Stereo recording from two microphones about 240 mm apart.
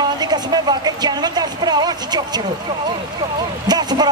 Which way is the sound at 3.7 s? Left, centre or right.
Centre.